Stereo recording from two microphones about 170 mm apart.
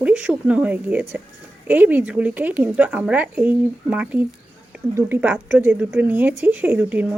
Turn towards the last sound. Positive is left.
turn(degrees=-10)  # may be behind; listen again after turning